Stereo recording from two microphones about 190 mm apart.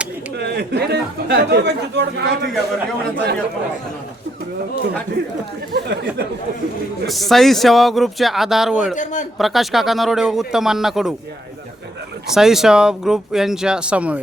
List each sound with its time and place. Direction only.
0.3 s speech: 60° right (ahead or behind)
5.7 s speech: 60° right (ahead or behind)
7.1 s speech: centre (ahead or behind)
12.3 s speech: centre (ahead or behind)